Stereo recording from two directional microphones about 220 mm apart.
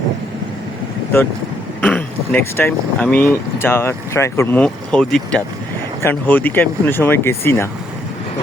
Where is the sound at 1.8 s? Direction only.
5° left (ahead or behind).